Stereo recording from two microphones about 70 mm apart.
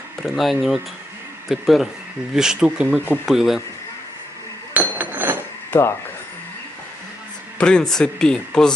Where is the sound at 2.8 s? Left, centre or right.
Right.